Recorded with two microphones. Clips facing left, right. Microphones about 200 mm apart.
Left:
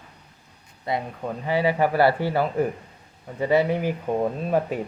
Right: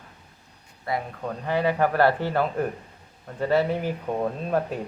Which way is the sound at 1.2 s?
10° left (ahead or behind).